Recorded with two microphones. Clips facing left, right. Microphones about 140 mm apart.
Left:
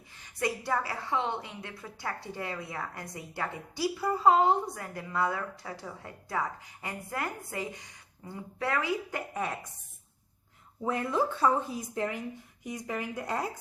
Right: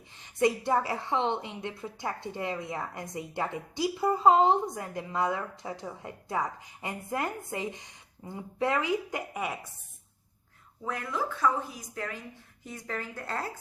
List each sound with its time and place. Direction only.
0.3 s a woman's voice: 20° right (ahead or behind)
10.8 s speech: 25° left (ahead or behind)